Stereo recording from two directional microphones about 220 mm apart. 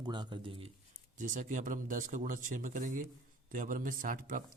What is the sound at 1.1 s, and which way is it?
A man's voice, 35° right (ahead or behind).